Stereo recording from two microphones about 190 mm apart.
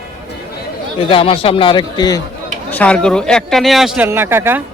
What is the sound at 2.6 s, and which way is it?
Speech, 5° left (ahead or behind).